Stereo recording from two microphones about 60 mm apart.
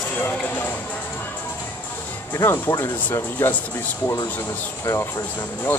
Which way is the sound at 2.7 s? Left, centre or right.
Left.